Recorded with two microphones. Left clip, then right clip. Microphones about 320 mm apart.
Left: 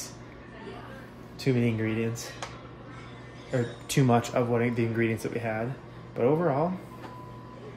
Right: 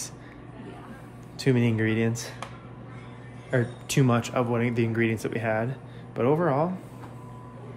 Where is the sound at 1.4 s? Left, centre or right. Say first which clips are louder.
Right 3 dB; centre.